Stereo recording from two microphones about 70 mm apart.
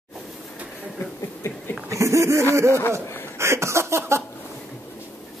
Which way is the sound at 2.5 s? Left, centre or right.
Right.